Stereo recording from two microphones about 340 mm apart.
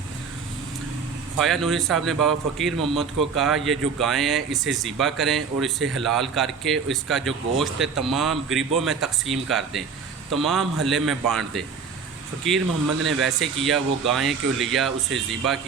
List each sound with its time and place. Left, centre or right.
1.4 s speech: centre
13.0 s a man's voice: right
13.2 s speech: centre